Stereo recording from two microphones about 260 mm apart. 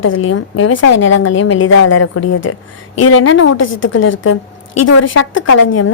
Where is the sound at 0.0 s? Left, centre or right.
Left.